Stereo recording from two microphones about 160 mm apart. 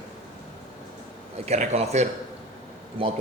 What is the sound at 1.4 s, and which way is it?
Speech, 45° right (ahead or behind).